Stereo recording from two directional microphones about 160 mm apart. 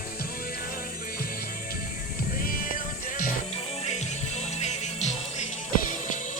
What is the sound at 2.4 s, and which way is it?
Music, 60° left (ahead or behind).